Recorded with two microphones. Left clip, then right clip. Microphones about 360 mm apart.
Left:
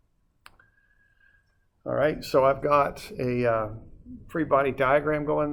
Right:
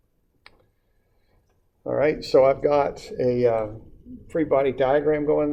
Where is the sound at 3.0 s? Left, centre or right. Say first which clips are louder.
Right 5 dB; left.